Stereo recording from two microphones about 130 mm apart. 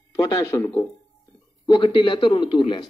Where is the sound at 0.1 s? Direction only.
35° left (ahead or behind).